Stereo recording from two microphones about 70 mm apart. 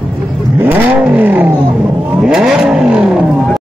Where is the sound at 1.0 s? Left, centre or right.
Right.